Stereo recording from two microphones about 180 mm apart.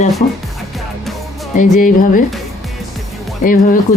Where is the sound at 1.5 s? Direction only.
45° left (ahead or behind).